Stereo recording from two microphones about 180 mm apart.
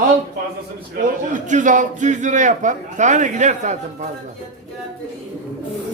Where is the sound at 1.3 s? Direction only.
45° right (ahead or behind).